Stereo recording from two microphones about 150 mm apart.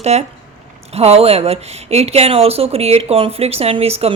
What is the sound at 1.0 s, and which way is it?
Speech, 45° right (ahead or behind).